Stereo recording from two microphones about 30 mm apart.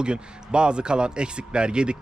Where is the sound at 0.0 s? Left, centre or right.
Right.